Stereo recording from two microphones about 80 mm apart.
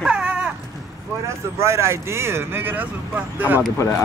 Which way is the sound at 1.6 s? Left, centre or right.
Right.